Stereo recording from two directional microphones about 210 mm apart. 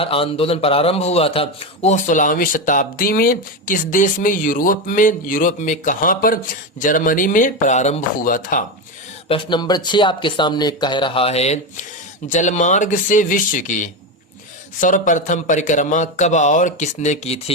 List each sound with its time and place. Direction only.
0.0 s a man's voice: 25° left (ahead or behind)
9.3 s a man's voice: 20° left (ahead or behind)